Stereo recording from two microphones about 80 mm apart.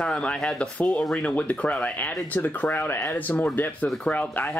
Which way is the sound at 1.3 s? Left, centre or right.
Centre.